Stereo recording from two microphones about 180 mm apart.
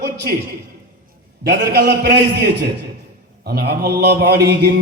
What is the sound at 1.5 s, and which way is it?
A man's voice, 65° right (ahead or behind).